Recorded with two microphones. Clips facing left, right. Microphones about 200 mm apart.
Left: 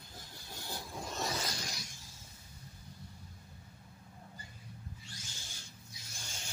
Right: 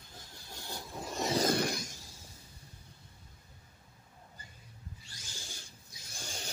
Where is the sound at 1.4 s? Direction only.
55° right (ahead or behind).